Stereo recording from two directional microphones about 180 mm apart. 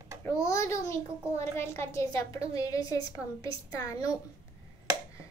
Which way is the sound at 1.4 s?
15° left (ahead or behind).